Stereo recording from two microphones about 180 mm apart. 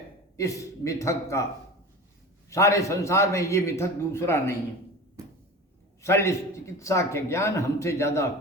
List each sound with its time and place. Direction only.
0.3 s a man's voice: 20° left (ahead or behind)
2.5 s a man's voice: 15° left (ahead or behind)
6.0 s a man's voice: 15° left (ahead or behind)